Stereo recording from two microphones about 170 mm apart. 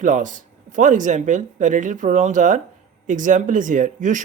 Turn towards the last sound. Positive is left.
turn(degrees=-50)  # may be behind; listen again after turning